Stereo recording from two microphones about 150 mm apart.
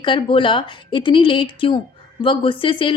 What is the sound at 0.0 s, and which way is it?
Speech, 35° left (ahead or behind).